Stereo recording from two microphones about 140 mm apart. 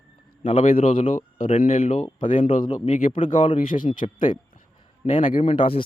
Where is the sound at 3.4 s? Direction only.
40° left (ahead or behind).